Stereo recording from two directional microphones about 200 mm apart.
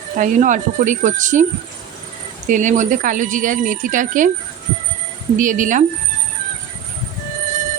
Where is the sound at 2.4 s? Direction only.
40° right (ahead or behind).